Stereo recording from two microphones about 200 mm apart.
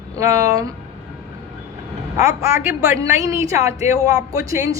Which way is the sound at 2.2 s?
15° right (ahead or behind).